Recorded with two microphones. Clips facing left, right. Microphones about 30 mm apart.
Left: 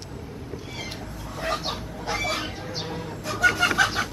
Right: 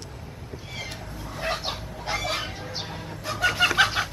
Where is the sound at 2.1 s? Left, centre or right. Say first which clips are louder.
Left 1 dB; centre.